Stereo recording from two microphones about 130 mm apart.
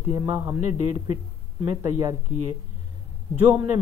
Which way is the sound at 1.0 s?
40° right (ahead or behind).